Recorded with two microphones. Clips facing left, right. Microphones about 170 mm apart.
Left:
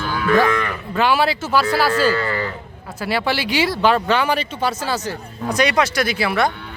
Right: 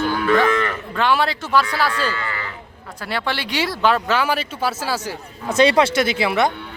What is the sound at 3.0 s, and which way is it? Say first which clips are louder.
Speech: left 4 dB; 5° left (ahead or behind).